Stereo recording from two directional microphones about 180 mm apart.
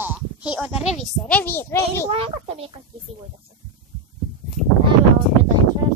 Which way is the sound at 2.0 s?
35° right (ahead or behind).